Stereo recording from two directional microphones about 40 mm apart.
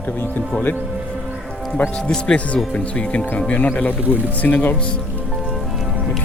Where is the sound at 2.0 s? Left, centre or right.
Left.